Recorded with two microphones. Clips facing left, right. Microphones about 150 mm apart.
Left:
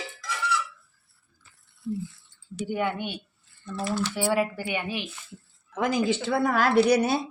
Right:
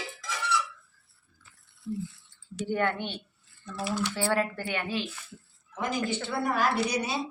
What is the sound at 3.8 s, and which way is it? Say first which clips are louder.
Speech: left 2 dB; 10° right (ahead or behind).